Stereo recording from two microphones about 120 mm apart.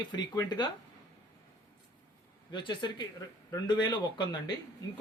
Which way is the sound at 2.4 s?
40° left (ahead or behind).